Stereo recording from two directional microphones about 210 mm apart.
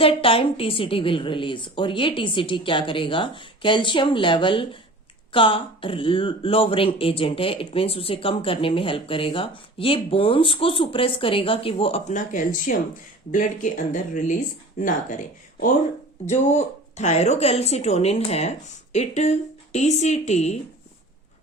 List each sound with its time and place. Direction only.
0.0 s speech: 25° left (ahead or behind)
16.2 s speech: 30° left (ahead or behind)